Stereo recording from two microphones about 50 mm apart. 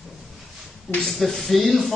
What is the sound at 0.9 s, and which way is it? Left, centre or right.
Speech, centre.